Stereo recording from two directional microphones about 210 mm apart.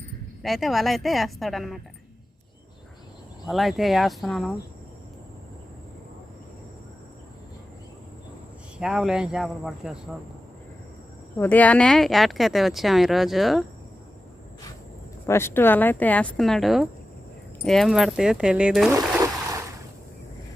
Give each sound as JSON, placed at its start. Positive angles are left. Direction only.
{"t": 0.4, "sound": "speech", "side_deg": 0}
{"t": 3.4, "sound": "speech", "side_deg": 0}
{"t": 8.8, "sound": "speech", "side_deg": 0}
{"t": 11.3, "sound": "speech", "side_deg": 10}
{"t": 15.3, "sound": "speech", "side_deg": 10}
{"t": 18.9, "sound": "a sound", "side_deg": -15}